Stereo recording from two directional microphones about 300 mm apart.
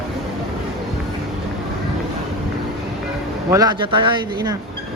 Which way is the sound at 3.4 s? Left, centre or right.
Centre.